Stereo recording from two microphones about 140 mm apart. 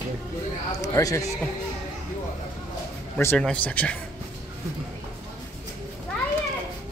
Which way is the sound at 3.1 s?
10° left (ahead or behind).